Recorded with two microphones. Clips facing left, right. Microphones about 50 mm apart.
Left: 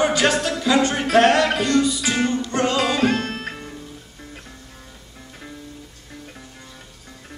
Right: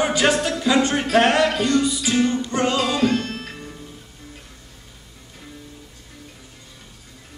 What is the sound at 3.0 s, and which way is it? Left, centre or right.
Music, left.